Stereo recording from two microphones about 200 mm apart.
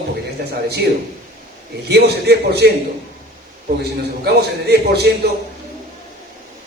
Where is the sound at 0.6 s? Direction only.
55° right (ahead or behind).